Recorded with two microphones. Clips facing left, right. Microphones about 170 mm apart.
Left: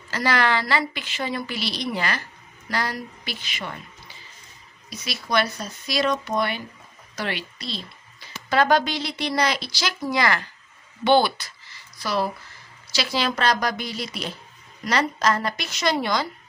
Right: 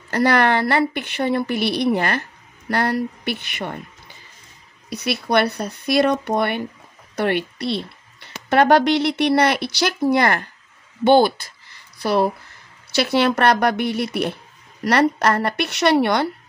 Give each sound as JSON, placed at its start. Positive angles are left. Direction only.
{"t": 0.1, "sound": "speech", "side_deg": -60}